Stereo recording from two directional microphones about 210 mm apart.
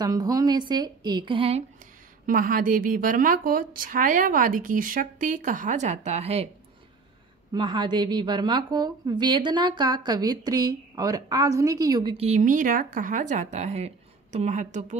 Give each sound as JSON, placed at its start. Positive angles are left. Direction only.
{"t": 0.0, "sound": "a woman's voice", "side_deg": -15}
{"t": 2.2, "sound": "speech", "side_deg": -40}
{"t": 7.5, "sound": "a woman's voice", "side_deg": -20}